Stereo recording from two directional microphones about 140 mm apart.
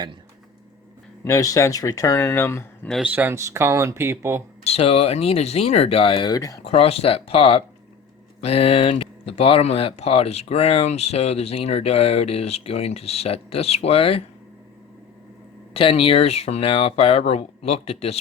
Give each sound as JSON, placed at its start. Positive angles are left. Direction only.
{"t": 1.2, "sound": "speech", "side_deg": 25}
{"t": 2.9, "sound": "speech", "side_deg": -10}
{"t": 4.6, "sound": "speech", "side_deg": 45}
{"t": 6.7, "sound": "speech", "side_deg": 45}
{"t": 15.7, "sound": "speech", "side_deg": 40}